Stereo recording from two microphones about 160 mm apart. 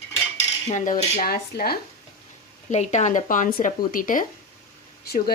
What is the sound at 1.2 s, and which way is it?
Speech, 70° left (ahead or behind).